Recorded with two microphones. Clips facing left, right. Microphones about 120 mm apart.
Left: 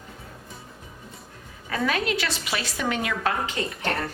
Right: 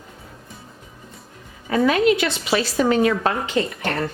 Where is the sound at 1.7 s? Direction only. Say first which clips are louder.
Right 9 dB; 25° right (ahead or behind).